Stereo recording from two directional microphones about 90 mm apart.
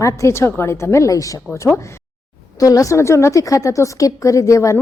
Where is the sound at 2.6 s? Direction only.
40° left (ahead or behind).